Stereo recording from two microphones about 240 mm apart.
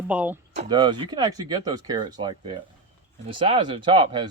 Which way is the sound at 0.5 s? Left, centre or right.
Centre.